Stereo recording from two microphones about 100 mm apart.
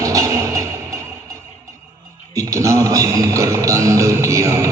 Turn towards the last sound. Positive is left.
turn(degrees=-30)  # may be behind; listen again after turning